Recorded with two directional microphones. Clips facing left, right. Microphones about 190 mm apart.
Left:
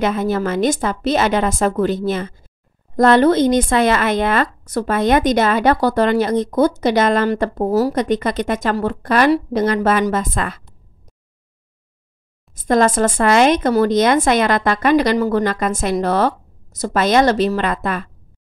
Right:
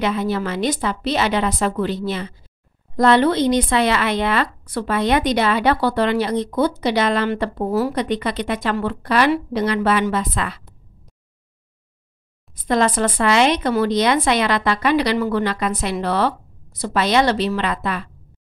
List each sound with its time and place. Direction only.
0.0 s a woman's voice: 45° left (ahead or behind)
12.5 s a woman's voice: 45° left (ahead or behind)